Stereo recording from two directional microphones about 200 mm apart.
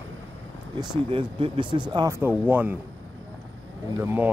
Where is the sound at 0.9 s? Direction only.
25° right (ahead or behind).